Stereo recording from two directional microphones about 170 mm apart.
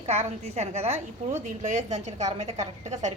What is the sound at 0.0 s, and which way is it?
A woman's voice, 40° right (ahead or behind).